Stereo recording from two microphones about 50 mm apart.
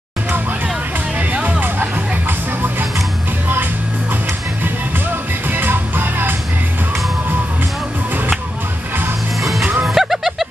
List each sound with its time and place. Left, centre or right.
1.3 s music: right
5.5 s music: right
9.4 s music: centre